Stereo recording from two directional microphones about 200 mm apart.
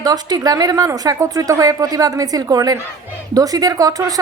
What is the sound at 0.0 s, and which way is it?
A woman's voice, 20° right (ahead or behind).